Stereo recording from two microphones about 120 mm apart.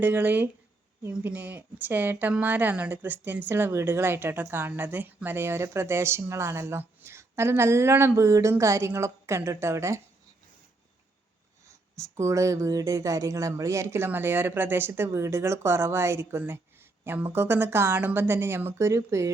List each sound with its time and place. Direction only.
0.0 s speech: 15° right (ahead or behind)
11.9 s speech: 25° right (ahead or behind)